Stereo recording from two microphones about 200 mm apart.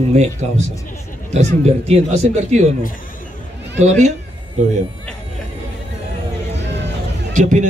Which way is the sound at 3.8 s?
35° right (ahead or behind).